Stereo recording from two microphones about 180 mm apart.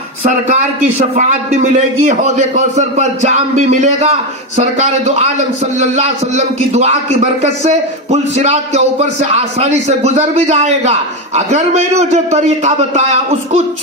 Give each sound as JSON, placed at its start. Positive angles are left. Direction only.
{"t": 0.9, "sound": "speech", "side_deg": -40}